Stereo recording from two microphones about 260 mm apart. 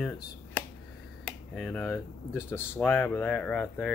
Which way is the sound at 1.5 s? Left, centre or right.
Centre.